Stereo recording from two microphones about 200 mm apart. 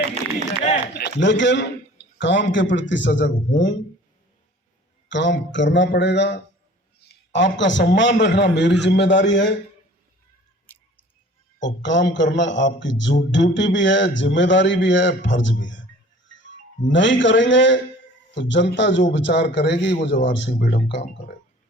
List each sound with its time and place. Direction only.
0.9 s a man's voice: 60° left (ahead or behind)
5.0 s a man's voice: 65° left (ahead or behind)
7.3 s a man's voice: 65° left (ahead or behind)
11.6 s a man's voice: 65° left (ahead or behind)